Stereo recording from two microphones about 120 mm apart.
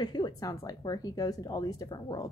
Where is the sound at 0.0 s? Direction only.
35° left (ahead or behind).